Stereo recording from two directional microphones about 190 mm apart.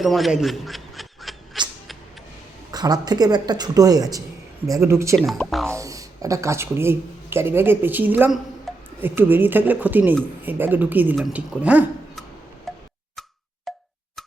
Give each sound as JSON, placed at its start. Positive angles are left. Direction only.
{"t": 0.0, "sound": "a sound", "side_deg": 0}
{"t": 2.7, "sound": "speech", "side_deg": -20}
{"t": 5.1, "sound": "speech", "side_deg": 0}
{"t": 5.7, "sound": "a man's voice", "side_deg": -15}
{"t": 12.7, "sound": "tick-tock", "side_deg": 0}
{"t": 13.7, "sound": "plop", "side_deg": 0}